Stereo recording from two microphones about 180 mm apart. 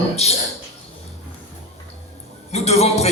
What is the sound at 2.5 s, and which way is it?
Speech, 35° left (ahead or behind).